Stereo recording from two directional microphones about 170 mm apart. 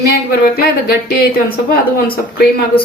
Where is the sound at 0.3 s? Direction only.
65° left (ahead or behind).